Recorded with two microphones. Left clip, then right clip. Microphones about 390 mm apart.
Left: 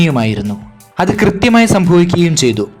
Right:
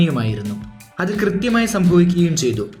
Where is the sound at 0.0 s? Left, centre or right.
Centre.